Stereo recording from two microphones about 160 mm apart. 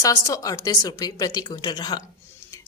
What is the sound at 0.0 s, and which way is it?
Speech, 20° left (ahead or behind).